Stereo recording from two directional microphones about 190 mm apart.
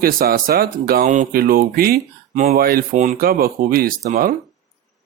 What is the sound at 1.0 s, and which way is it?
Speech, 40° right (ahead or behind).